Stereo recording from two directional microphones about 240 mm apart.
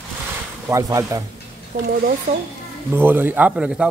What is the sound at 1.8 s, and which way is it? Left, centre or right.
Speech, right.